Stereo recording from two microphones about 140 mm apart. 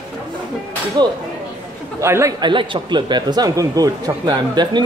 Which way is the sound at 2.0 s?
20° right (ahead or behind).